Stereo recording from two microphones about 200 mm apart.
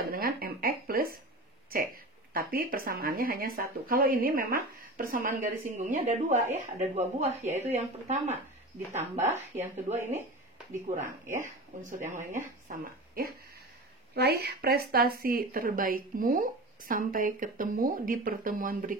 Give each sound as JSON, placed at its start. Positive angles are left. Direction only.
{"t": 0.1, "sound": "a sound", "side_deg": -45}
{"t": 2.3, "sound": "speech", "side_deg": -45}
{"t": 9.1, "sound": "speech", "side_deg": -10}
{"t": 10.7, "sound": "speech", "side_deg": -35}